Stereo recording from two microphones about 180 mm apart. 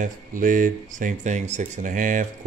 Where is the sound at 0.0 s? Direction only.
50° right (ahead or behind).